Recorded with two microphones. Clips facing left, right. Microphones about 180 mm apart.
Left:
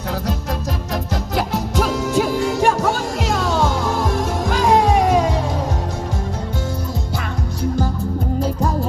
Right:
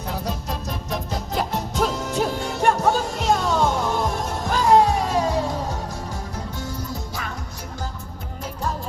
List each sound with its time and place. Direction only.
1.7 s music: 90° left